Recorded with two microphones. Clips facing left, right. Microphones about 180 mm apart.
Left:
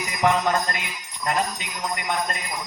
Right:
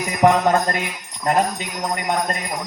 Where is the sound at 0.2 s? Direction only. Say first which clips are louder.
Right 6 dB; 50° right (ahead or behind).